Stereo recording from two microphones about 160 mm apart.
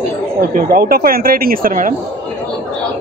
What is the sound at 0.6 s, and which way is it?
Speech, 70° right (ahead or behind).